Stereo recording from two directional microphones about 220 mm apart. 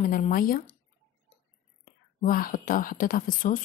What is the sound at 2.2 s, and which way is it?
Speech, 40° left (ahead or behind).